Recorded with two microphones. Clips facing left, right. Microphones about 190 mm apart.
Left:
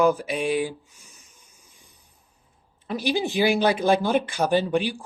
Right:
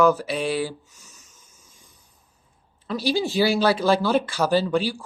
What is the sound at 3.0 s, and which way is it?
Speech, 15° left (ahead or behind).